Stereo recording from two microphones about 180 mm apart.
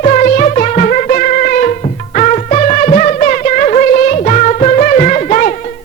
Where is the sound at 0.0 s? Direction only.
45° left (ahead or behind).